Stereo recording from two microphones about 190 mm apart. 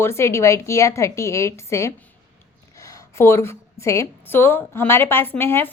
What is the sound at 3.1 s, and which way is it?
A woman's voice, 15° left (ahead or behind).